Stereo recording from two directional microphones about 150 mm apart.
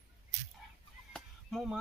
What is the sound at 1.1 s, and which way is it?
Honk, centre (ahead or behind).